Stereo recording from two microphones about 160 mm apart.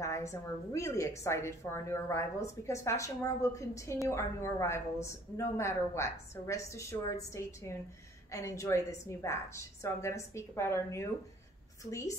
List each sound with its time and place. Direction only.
0.0 s a woman's voice: 20° left (ahead or behind)
8.3 s a woman's voice: 20° left (ahead or behind)